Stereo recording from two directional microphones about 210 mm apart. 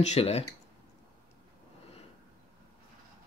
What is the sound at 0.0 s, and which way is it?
Speech, 30° left (ahead or behind).